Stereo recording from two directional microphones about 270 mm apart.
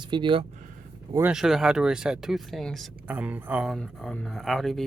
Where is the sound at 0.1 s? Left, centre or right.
Centre.